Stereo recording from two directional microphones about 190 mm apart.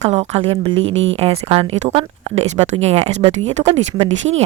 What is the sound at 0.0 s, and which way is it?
A woman's voice, 35° right (ahead or behind).